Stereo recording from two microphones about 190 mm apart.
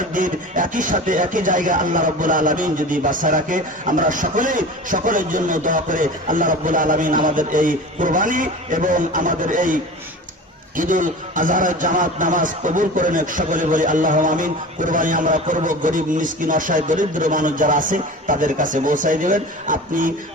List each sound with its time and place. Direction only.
0.1 s speech: 45° right (ahead or behind)
10.8 s speech: 45° right (ahead or behind)